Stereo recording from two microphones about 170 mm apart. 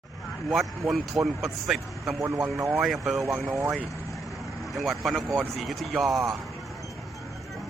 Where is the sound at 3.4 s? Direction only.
15° right (ahead or behind).